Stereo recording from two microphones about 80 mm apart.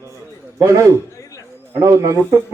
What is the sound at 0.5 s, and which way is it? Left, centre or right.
A man's voice, right.